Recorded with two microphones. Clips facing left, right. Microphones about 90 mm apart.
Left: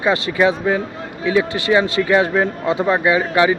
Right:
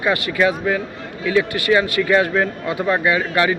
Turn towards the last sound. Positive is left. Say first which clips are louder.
# left 3 dB
turn(degrees=20)  # may be behind; listen again after turning